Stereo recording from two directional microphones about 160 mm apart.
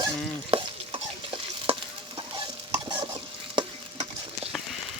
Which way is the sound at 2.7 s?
30° right (ahead or behind).